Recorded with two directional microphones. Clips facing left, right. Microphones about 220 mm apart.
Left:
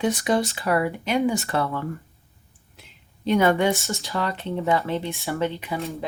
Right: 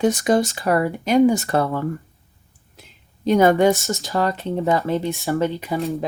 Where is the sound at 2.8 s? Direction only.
40° right (ahead or behind).